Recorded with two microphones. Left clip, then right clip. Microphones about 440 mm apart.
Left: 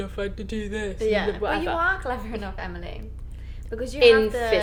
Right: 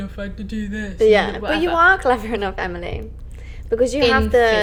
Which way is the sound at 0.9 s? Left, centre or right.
Right.